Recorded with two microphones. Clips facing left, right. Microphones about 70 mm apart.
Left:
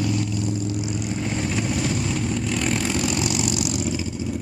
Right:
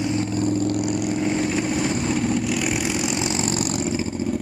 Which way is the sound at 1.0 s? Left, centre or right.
Centre.